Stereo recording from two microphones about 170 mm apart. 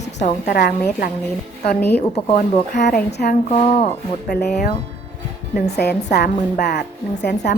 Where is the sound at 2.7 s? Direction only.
80° left.